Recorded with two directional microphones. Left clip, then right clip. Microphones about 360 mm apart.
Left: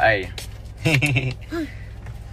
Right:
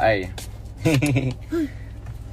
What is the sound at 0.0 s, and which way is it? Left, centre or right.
Speech, centre.